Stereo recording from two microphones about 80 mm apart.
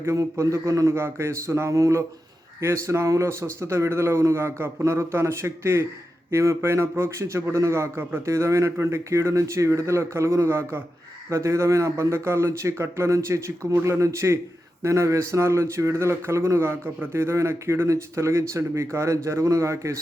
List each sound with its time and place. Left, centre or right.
0.0 s speech: right